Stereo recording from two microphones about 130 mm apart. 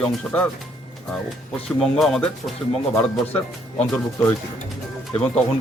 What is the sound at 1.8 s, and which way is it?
Speech, centre (ahead or behind).